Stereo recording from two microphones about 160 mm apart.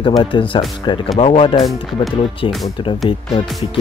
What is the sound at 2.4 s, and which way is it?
Speech, 35° left (ahead or behind).